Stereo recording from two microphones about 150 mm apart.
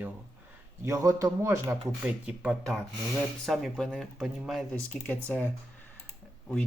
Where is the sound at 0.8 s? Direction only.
20° right (ahead or behind).